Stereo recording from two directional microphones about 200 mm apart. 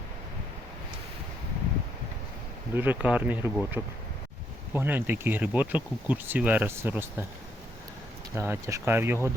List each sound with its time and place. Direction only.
2.7 s speech: 10° right (ahead or behind)
8.4 s speech: 15° right (ahead or behind)